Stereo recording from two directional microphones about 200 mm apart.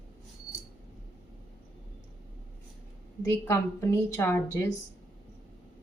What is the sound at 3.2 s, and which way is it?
Speech, 15° left (ahead or behind).